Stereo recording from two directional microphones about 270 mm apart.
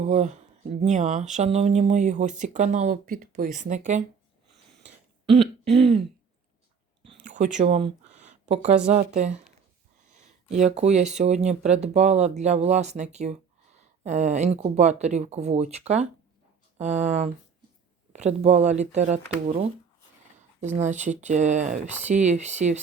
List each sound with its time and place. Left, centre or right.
0.0 s speech: right
5.4 s throat clearing: centre
7.3 s speech: right
8.2 s a sound: right
8.9 s speech: right